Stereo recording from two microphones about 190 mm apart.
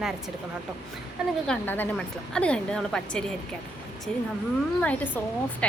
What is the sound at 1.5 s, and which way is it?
A woman's voice, 5° left (ahead or behind).